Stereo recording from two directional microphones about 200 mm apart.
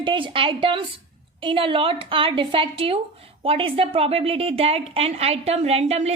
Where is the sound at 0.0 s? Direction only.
25° right (ahead or behind).